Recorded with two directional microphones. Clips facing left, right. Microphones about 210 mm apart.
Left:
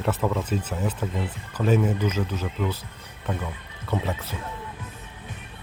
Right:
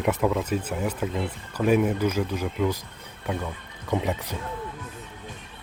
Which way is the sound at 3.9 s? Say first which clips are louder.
Right 2 dB; 15° right (ahead or behind).